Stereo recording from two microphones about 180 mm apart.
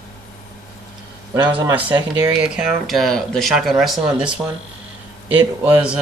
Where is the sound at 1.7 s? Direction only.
10° right (ahead or behind).